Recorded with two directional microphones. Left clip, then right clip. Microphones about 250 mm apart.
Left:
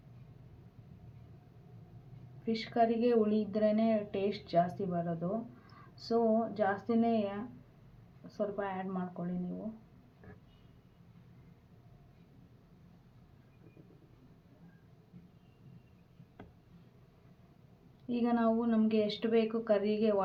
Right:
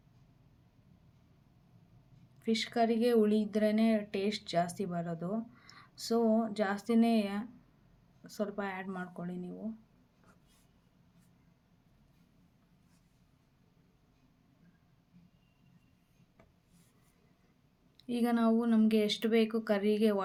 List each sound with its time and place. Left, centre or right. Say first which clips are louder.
2.4 s speech: left 1 dB; right
18.1 s speech: even; right